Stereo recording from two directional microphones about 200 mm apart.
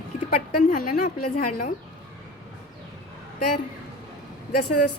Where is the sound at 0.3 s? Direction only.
45° left (ahead or behind).